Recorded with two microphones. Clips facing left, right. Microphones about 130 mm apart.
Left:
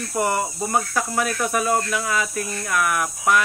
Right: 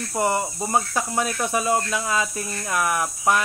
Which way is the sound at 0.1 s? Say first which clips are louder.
Even; 25° right (ahead or behind).